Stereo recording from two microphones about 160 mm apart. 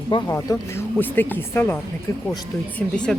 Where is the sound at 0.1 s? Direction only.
25° left (ahead or behind).